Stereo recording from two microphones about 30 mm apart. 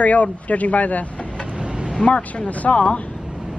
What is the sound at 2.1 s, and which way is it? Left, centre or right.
Speech, left.